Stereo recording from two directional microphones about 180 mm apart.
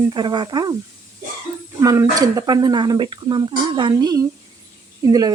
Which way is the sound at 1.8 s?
20° right (ahead or behind).